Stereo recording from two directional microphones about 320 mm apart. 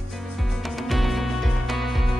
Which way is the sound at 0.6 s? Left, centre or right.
Centre.